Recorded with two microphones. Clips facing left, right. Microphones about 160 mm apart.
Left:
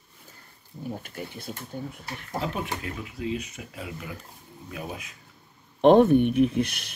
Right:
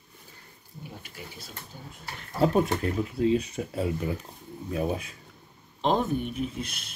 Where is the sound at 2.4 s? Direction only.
40° right (ahead or behind).